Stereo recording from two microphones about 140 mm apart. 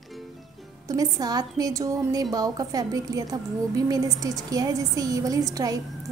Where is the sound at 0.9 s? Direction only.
25° right (ahead or behind).